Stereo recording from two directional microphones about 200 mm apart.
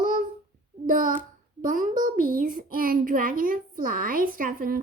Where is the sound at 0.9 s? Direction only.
40° right (ahead or behind).